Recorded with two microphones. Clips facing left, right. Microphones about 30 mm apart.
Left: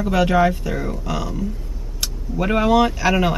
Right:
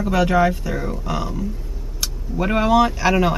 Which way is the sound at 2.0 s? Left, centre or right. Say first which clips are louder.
Even; centre.